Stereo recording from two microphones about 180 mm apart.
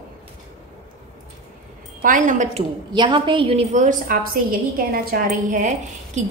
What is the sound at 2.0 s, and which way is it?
Speech, 45° right (ahead or behind).